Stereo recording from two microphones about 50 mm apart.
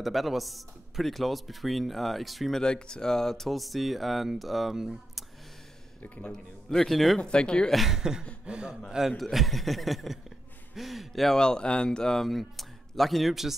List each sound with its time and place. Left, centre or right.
0.0 s speech: centre
2.6 s speech: centre
6.3 s speech: centre
7.2 s speech: centre
7.7 s speech: centre
8.0 s a sound: centre
8.5 s speech: centre
9.1 s speech: centre
11.3 s speech: centre
12.3 s speech: centre